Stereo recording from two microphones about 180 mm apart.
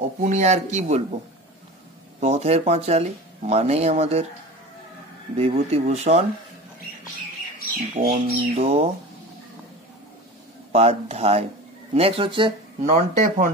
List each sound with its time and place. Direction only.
0.2 s speech: 40° right (ahead or behind)
2.1 s speech: 35° right (ahead or behind)
5.4 s speech: 35° right (ahead or behind)
7.9 s speech: 40° right (ahead or behind)
10.7 s speech: 35° right (ahead or behind)
12.9 s speech: 40° right (ahead or behind)